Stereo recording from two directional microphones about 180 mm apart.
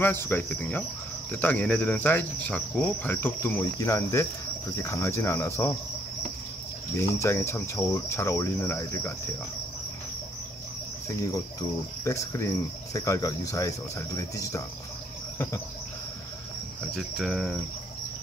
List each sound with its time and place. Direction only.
0.0 s cricket: 10° left (ahead or behind)
7.0 s cricket: 15° left (ahead or behind)
12.0 s cricket: 15° left (ahead or behind)
16.9 s cricket: centre (ahead or behind)